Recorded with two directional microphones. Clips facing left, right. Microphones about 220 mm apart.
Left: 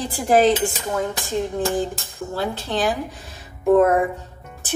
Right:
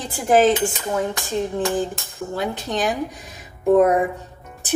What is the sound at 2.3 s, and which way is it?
Speech, 15° right (ahead or behind).